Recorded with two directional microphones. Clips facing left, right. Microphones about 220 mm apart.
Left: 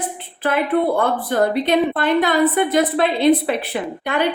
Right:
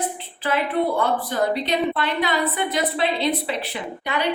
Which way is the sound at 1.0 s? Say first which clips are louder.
Left 4 dB; 55° left (ahead or behind).